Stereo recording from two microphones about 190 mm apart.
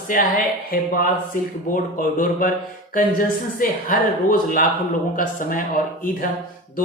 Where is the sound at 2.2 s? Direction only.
45° left (ahead or behind).